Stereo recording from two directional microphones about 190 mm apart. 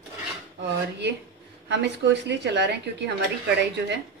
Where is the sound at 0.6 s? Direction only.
65° right (ahead or behind).